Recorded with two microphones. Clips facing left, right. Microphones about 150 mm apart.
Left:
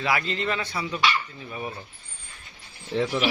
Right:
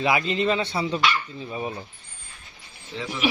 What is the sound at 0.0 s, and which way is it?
Speech, 20° right (ahead or behind).